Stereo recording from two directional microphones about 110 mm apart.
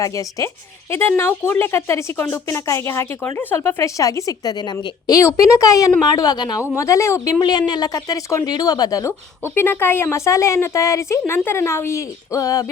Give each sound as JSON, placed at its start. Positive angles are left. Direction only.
{"t": 0.0, "sound": "speech", "side_deg": 30}
{"t": 6.6, "sound": "speech", "side_deg": 30}
{"t": 7.7, "sound": "speech", "side_deg": 35}
{"t": 9.4, "sound": "speech", "side_deg": 20}